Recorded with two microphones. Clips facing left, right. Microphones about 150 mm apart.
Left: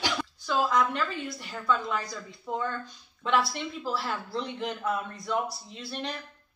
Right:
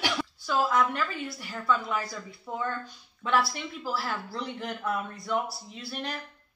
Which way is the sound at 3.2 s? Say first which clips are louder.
Even; 5° right (ahead or behind).